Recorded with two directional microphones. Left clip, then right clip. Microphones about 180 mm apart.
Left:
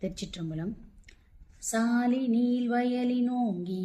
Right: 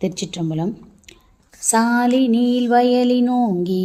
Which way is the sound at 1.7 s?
45° right (ahead or behind).